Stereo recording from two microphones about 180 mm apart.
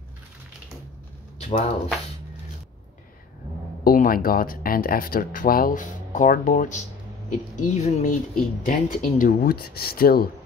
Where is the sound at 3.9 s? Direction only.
50° left (ahead or behind).